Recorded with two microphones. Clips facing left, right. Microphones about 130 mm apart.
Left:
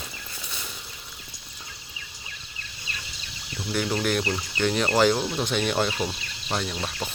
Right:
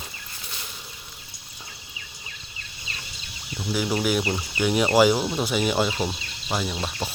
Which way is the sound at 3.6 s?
5° right (ahead or behind).